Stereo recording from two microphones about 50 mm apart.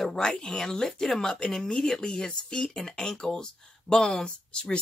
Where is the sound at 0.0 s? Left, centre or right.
Centre.